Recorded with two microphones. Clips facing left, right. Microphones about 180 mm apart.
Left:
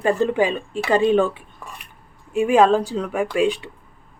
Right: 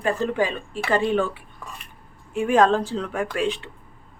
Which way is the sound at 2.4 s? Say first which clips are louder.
Left 3 dB; 10° left (ahead or behind).